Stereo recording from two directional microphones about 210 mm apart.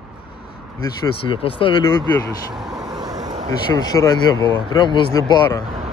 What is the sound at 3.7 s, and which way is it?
Speech, 15° left (ahead or behind).